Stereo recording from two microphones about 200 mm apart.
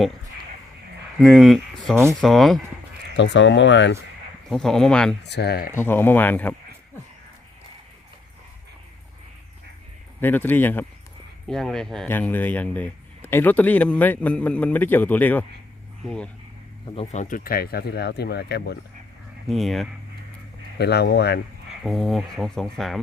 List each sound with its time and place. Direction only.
1.2 s speech: centre (ahead or behind)
3.2 s speech: 65° left (ahead or behind)
4.4 s speech: centre (ahead or behind)
5.2 s speech: 55° left (ahead or behind)
5.7 s speech: 10° left (ahead or behind)
10.2 s speech: 10° left (ahead or behind)
16.9 s speech: 30° left (ahead or behind); by 18.8 s 55° left (ahead or behind)
19.5 s speech: centre (ahead or behind)
20.7 s speech: 55° left (ahead or behind)
21.8 s speech: centre (ahead or behind)